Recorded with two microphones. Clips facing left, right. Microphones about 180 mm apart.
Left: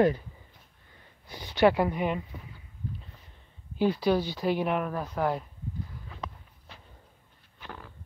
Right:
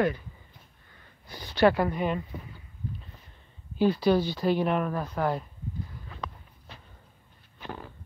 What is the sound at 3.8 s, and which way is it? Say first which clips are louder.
Speech: right 2 dB; 10° left (ahead or behind).